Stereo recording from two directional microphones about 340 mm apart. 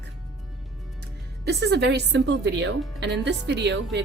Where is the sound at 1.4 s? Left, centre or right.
Right.